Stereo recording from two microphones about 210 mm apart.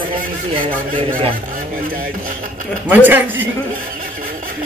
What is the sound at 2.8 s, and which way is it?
Speech, 10° right (ahead or behind).